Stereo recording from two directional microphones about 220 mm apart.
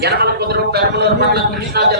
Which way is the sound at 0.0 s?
45° right (ahead or behind).